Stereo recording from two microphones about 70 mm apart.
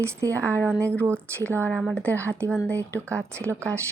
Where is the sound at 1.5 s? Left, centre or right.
Left.